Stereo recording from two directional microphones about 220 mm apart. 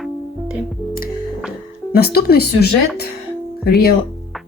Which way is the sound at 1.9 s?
45° left (ahead or behind).